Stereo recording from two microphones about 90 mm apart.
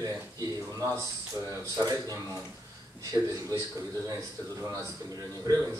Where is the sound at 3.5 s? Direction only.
40° right (ahead or behind).